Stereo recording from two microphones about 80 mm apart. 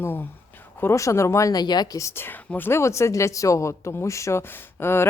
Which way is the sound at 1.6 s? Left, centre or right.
Left.